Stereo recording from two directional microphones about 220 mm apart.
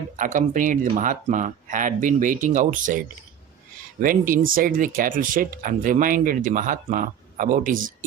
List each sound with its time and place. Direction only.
0.2 s speech: 35° right (ahead or behind)
4.0 s speech: 40° right (ahead or behind)